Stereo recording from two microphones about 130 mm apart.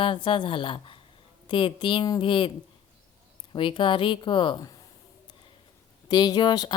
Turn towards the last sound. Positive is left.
turn(degrees=35)  # may be behind; listen again after turning